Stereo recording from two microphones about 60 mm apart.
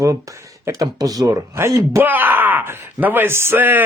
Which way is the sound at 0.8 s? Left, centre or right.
Right.